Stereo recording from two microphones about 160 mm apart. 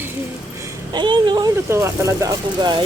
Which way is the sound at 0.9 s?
30° right (ahead or behind).